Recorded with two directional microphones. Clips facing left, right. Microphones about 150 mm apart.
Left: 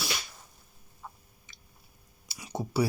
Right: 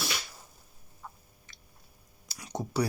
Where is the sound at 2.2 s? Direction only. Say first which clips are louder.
Left 1 dB; 5° left (ahead or behind).